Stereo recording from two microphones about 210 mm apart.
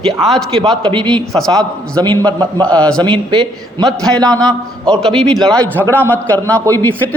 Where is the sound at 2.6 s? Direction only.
5° left (ahead or behind).